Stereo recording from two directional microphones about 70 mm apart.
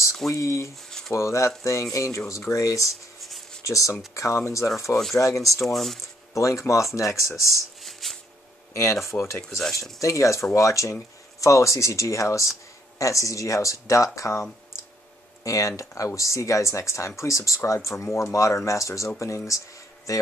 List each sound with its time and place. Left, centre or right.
0.3 s speech: left
0.8 s a sound: centre
1.1 s speech: left
5.7 s speech: centre
6.3 s speech: left
7.8 s a sound: centre
9.1 s speech: left
9.9 s speech: left
15.4 s speech: left